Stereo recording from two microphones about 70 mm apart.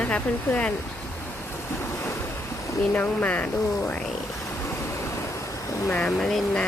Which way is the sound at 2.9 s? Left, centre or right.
Left.